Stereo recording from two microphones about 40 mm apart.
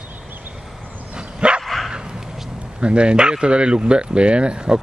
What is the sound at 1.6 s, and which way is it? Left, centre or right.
Dog, centre.